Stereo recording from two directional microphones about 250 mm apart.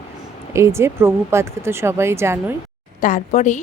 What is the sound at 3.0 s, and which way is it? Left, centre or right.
Speech, left.